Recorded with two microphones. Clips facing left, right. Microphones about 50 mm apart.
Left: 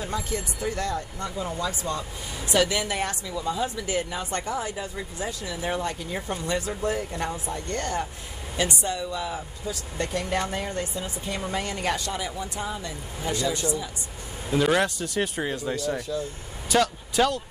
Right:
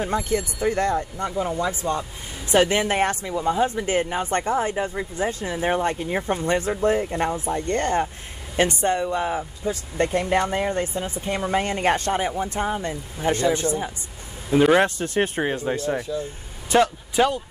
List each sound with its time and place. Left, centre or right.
0.0 s speech: right
14.5 s speech: right